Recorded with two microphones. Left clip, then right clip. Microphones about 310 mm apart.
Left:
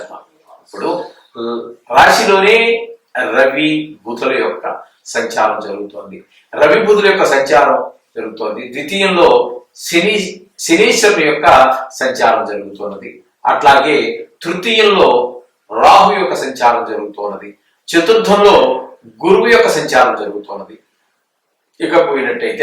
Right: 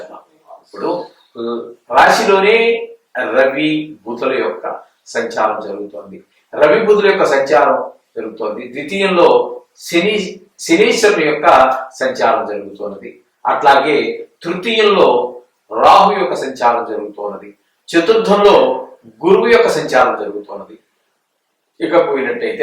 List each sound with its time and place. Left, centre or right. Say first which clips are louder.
0.9 s speech: left 1 dB; centre
9.2 s speech: left 1 dB; right
10.7 s speech: left 1 dB; centre; by 13.0 s right
13.0 s speech: left 3 dB; centre
15.0 s a man's voice: left 2 dB; right
17.9 s speech: left 2 dB; centre
18.3 s speech: left 1 dB; right
18.7 s a man's voice: left 2 dB; centre
20.1 s speech: left 1 dB; centre
21.8 s speech: left 1 dB; centre